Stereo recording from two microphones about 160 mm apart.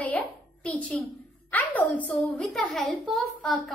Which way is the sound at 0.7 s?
10° left (ahead or behind).